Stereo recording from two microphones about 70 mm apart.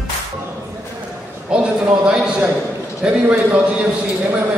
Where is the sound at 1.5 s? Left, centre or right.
Centre.